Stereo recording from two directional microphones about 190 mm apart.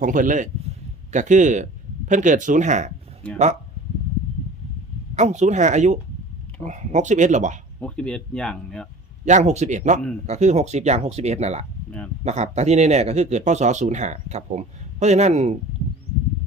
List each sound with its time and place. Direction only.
0.0 s a man's voice: 45° right (ahead or behind)
5.1 s speech: 35° right (ahead or behind)
7.8 s speech: 5° left (ahead or behind)
9.2 s speech: 40° right (ahead or behind)
11.9 s speech: 5° left (ahead or behind)
12.2 s speech: 35° right (ahead or behind)